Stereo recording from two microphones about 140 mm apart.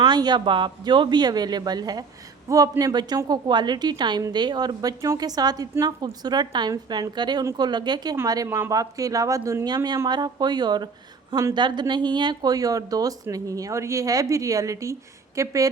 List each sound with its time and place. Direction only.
0.0 s a woman's voice: 30° right (ahead or behind)